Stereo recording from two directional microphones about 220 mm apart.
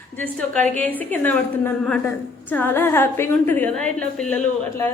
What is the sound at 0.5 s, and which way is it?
Speech, 35° right (ahead or behind).